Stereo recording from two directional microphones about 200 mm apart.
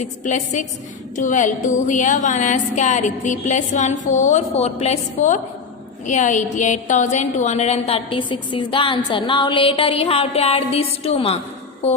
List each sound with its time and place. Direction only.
0.0 s a woman's voice: 35° left (ahead or behind)
11.8 s music: 30° left (ahead or behind)